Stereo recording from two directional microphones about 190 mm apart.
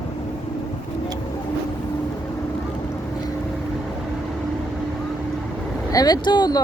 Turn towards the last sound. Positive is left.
turn(degrees=20)  # may be behind; listen again after turning